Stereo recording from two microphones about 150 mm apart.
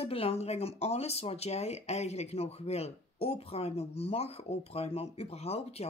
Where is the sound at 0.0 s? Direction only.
40° left (ahead or behind).